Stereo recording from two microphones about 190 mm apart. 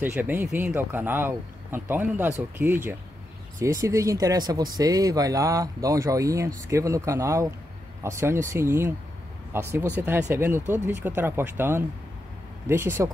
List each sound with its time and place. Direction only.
0.0 s speech: 10° right (ahead or behind)